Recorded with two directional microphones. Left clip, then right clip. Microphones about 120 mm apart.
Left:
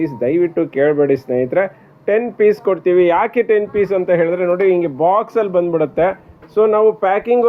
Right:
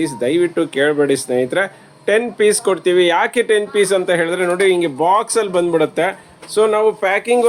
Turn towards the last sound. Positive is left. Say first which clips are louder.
# left 1 dB
turn(degrees=0)  # may be behind; listen again after turning